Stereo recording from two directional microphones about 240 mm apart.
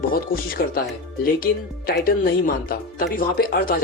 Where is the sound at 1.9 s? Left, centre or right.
Left.